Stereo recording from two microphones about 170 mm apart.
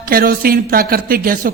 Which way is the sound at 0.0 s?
60° right (ahead or behind).